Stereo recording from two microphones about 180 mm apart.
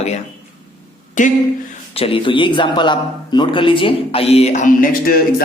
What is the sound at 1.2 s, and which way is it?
Speech, 45° left (ahead or behind).